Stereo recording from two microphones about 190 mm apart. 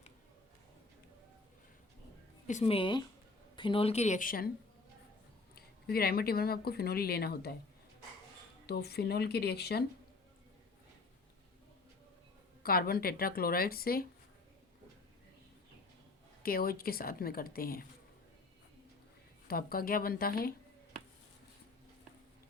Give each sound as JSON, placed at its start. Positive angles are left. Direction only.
{"t": 2.5, "sound": "speech", "side_deg": 35}
{"t": 5.5, "sound": "speech", "side_deg": 55}
{"t": 8.6, "sound": "speech", "side_deg": 55}
{"t": 12.6, "sound": "speech", "side_deg": 50}
{"t": 16.4, "sound": "speech", "side_deg": 50}
{"t": 19.5, "sound": "speech", "side_deg": 50}